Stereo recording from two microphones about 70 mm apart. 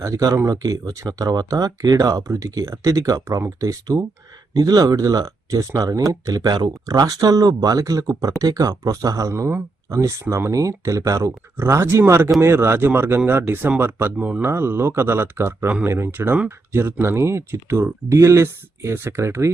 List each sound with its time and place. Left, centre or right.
0.0 s speech: right
9.3 s speech: right
11.5 s speech: right